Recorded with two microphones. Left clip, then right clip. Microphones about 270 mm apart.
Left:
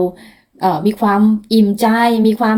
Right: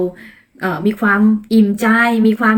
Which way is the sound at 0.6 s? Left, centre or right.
Centre.